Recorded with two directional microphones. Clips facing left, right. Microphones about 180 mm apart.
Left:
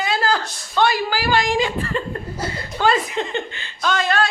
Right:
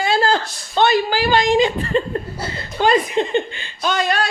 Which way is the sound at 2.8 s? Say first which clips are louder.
Right 3 dB; 20° right (ahead or behind).